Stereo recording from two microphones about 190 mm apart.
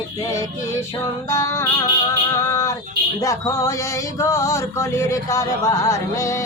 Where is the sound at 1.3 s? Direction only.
15° left (ahead or behind).